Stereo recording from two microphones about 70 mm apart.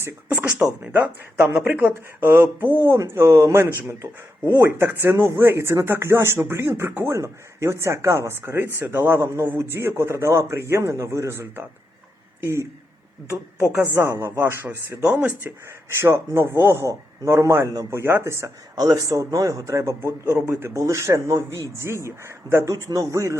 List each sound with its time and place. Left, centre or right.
0.8 s a man's voice: right
7.1 s a man's voice: right
13.7 s a man's voice: right
16.0 s a man's voice: right
18.8 s a man's voice: right
19.0 s speech: right